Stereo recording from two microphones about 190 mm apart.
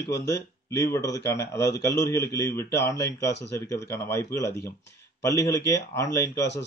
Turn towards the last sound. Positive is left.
turn(degrees=15)  # may be behind; listen again after turning